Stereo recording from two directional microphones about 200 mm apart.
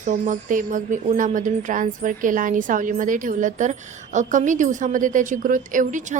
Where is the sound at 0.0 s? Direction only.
40° right (ahead or behind).